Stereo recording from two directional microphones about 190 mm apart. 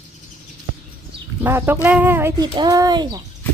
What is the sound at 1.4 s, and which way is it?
Speech, 10° right (ahead or behind).